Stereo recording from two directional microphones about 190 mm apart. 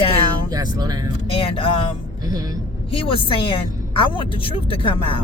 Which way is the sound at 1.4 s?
30° left (ahead or behind).